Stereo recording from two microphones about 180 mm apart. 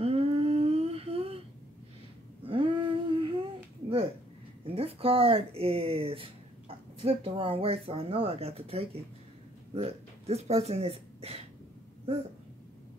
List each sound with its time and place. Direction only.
0.0 s humming: 35° right (ahead or behind)
2.4 s a sound: 30° right (ahead or behind)
4.6 s speech: 30° right (ahead or behind)